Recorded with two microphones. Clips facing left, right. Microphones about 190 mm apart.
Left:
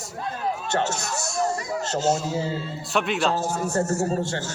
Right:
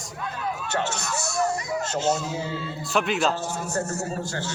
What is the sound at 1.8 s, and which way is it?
Speech, 35° left (ahead or behind).